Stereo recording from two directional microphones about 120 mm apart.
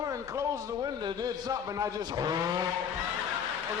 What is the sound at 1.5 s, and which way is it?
Speech, 30° right (ahead or behind).